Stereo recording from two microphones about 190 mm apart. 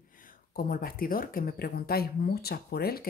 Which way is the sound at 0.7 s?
50° left (ahead or behind).